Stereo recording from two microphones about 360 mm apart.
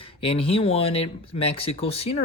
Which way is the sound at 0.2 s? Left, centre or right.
Centre.